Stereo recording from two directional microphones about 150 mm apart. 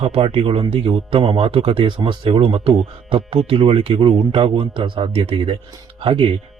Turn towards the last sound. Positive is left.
turn(degrees=-35)  # may be behind; listen again after turning